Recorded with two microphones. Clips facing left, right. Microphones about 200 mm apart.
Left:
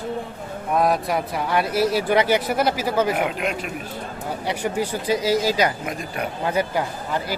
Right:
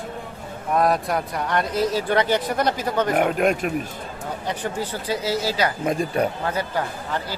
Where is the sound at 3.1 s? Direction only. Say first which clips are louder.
Right 5 dB; 50° right (ahead or behind).